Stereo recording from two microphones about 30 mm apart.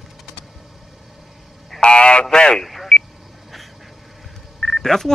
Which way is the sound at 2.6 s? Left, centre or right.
Centre.